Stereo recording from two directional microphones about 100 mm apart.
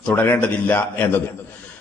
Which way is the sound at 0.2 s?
15° left (ahead or behind).